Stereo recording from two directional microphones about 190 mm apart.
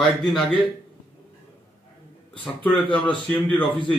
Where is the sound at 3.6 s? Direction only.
25° left (ahead or behind).